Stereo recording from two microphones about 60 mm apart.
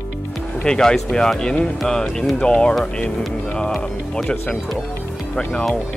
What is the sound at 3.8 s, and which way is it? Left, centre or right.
Speech, centre.